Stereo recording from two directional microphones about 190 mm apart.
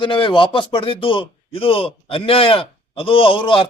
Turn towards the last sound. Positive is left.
turn(degrees=25)  # may be behind; listen again after turning